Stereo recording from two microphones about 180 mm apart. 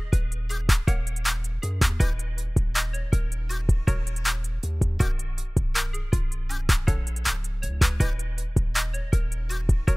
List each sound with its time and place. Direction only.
0.1 s music: centre (ahead or behind)